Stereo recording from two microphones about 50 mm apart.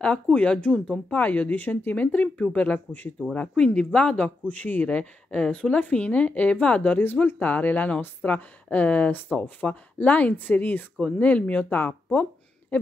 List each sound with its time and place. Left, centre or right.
0.0 s speech: left
3.3 s speech: centre
4.5 s speech: left
11.1 s speech: left